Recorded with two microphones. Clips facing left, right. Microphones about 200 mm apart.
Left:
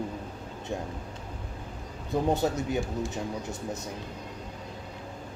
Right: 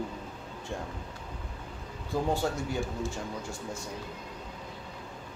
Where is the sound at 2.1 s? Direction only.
20° left (ahead or behind).